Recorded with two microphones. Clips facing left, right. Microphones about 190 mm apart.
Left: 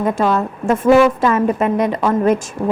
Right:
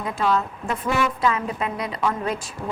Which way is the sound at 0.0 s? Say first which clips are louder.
Left 7 dB; 50° left (ahead or behind).